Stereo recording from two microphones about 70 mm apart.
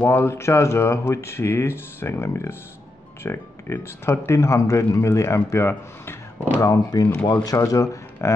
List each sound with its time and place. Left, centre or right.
0.0 s speech: left
6.6 s speech: left